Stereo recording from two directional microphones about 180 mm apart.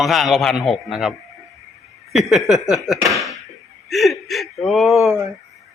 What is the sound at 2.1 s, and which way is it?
Speech, centre (ahead or behind).